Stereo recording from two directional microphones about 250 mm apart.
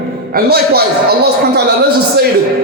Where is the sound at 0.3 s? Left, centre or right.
Right.